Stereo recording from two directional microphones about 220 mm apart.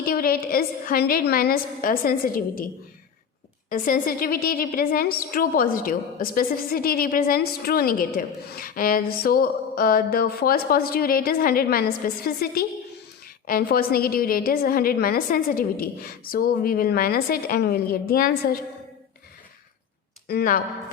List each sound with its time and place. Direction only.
0.0 s a woman's voice: 40° left (ahead or behind)
3.7 s a woman's voice: 40° left (ahead or behind)
20.2 s speech: 40° left (ahead or behind)